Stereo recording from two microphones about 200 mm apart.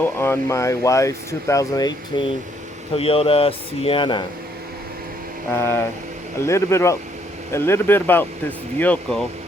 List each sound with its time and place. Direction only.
0.0 s speech: 10° left (ahead or behind)
5.5 s speech: 15° left (ahead or behind)